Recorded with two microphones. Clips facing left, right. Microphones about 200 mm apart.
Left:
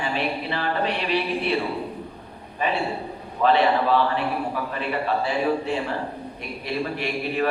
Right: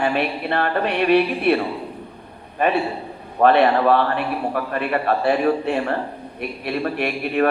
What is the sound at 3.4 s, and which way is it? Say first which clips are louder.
A man's voice: right 4 dB; 60° right (ahead or behind).